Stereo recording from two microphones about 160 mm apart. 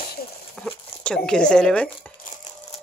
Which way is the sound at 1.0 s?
5° left (ahead or behind).